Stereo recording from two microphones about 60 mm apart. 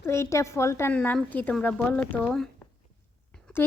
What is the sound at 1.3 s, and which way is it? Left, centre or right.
Speech, left.